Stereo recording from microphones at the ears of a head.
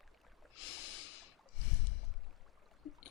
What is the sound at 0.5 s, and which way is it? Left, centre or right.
Snort, left.